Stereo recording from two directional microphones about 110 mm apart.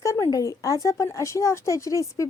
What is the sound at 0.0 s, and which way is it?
A woman's voice, 25° left (ahead or behind).